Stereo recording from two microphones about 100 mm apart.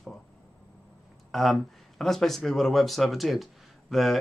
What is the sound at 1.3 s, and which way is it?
Speech, centre (ahead or behind).